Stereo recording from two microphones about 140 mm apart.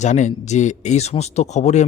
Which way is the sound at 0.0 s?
60° left (ahead or behind).